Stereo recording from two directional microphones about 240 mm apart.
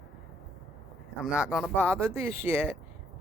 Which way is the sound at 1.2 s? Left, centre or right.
Centre.